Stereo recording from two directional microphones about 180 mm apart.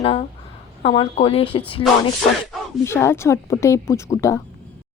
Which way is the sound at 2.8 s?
15° left (ahead or behind).